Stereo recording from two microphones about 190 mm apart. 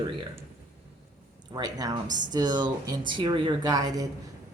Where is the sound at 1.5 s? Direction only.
20° right (ahead or behind).